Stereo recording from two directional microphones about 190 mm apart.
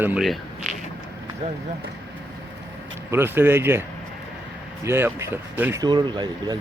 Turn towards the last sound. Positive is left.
turn(degrees=-25)  # may be behind; listen again after turning